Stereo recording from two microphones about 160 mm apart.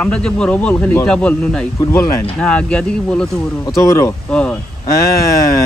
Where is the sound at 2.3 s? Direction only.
5° left (ahead or behind).